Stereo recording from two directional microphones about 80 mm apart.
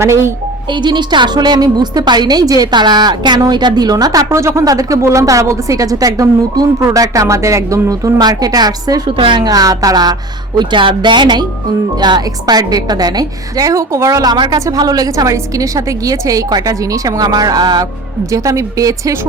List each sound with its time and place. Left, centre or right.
0.0 s speech: right
0.7 s a woman's voice: right
4.3 s speech: right
4.6 s a woman's voice: right
8.2 s a woman's voice: right
9.0 s a woman's voice: right
9.5 s a woman's voice: right
10.6 s a woman's voice: right
18.3 s a woman's voice: right